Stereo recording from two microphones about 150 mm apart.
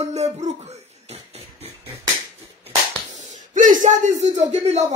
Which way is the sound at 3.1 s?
55° right (ahead or behind).